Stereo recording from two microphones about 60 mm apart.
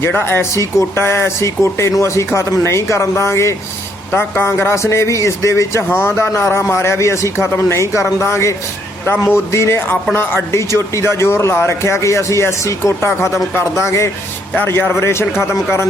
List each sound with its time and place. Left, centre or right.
0.5 s speech: left
4.1 s speech: left
7.5 s a man's voice: left
9.9 s speech: left
14.5 s a man's voice: left